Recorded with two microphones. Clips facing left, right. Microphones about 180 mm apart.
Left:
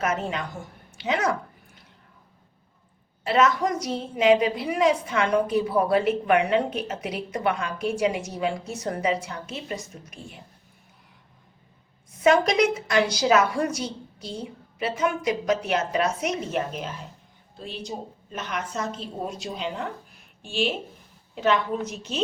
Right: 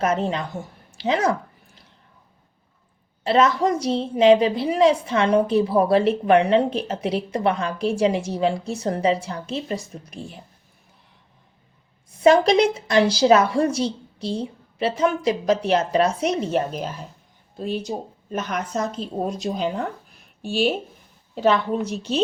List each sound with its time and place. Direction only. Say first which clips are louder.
0.0 s a woman's voice: right 5 dB; 30° right (ahead or behind)
0.9 s a sound: right 4 dB; 30° right (ahead or behind)
3.2 s a woman's voice: right 3 dB; 30° right (ahead or behind)
12.2 s a woman's voice: right 4 dB; 30° right (ahead or behind)